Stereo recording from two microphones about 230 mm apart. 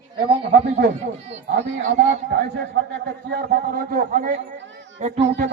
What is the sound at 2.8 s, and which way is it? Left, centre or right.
Music, right.